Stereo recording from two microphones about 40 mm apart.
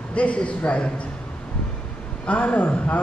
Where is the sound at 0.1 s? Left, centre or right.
Left.